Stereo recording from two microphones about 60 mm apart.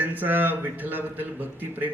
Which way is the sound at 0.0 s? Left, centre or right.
Right.